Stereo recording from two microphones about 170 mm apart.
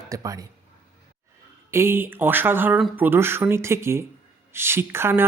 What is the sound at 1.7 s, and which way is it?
Speech, 15° right (ahead or behind).